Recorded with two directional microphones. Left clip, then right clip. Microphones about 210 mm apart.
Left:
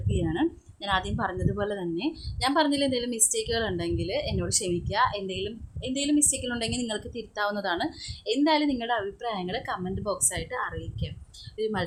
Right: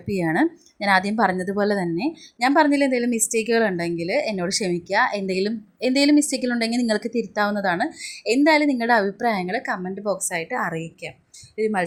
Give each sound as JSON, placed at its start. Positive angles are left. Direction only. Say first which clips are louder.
{"t": 0.3, "sound": "a woman's voice", "louder": "right 8 dB", "side_deg": -25}
{"t": 2.0, "sound": "a woman's voice", "louder": "right 6 dB", "side_deg": -10}